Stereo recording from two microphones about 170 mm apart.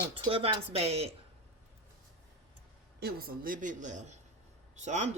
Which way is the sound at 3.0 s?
60° right (ahead or behind).